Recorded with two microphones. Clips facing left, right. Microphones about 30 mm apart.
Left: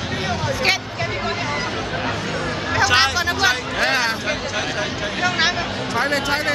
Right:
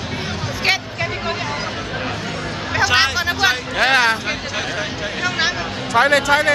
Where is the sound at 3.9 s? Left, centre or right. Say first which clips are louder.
Right 7 dB; right.